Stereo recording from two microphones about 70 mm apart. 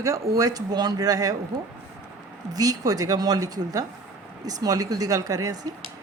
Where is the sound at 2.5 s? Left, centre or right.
Right.